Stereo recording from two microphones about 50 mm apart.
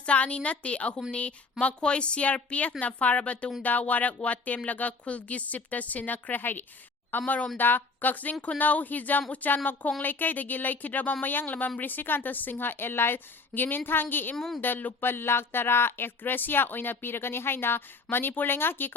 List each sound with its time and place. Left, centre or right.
0.0 s a woman's voice: left
14.3 s speech: centre
14.6 s a woman's voice: left
15.0 s speech: left